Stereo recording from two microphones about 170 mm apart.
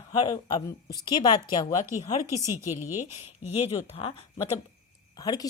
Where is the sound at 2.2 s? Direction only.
15° right (ahead or behind).